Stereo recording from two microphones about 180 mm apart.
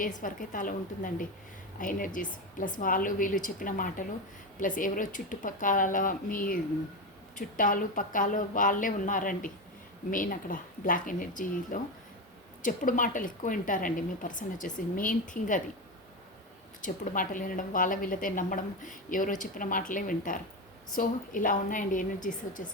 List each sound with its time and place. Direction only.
0.0 s a woman's voice: 45° left (ahead or behind)
16.8 s a woman's voice: 45° left (ahead or behind)